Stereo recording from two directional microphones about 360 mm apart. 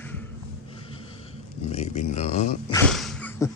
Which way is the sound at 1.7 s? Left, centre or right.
Centre.